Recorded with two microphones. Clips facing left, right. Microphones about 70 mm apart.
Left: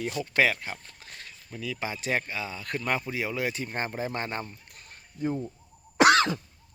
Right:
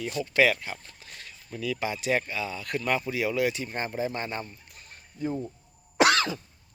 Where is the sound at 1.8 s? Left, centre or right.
Left.